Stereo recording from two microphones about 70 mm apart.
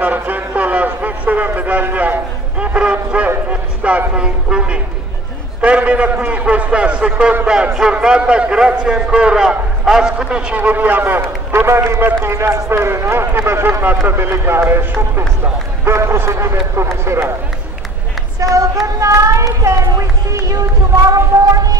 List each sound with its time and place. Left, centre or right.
0.0 s a man's voice: right
3.4 s a sound: centre
4.1 s a man's voice: centre; by 17.3 s right
18.4 s speech: right